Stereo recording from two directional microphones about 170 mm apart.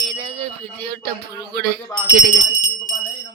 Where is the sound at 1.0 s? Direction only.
70° right (ahead or behind).